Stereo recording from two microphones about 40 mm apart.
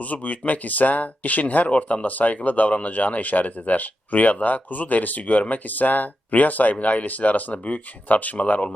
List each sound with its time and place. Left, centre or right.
0.0 s speech: left